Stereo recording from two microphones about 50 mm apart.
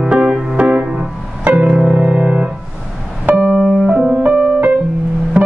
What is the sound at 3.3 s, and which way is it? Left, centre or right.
Music, right.